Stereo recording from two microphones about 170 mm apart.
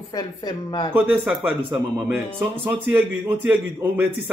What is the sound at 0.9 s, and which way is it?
A man's voice, 10° right (ahead or behind).